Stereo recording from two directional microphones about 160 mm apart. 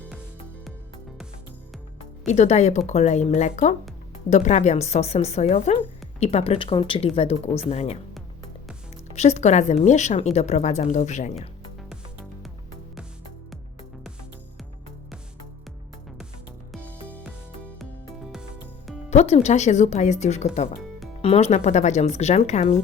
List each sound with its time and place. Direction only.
2.2 s a woman's voice: 45° left (ahead or behind)
9.1 s a woman's voice: 45° left (ahead or behind)
11.3 s music: centre (ahead or behind)
16.7 s music: centre (ahead or behind)
19.1 s a woman's voice: 40° left (ahead or behind)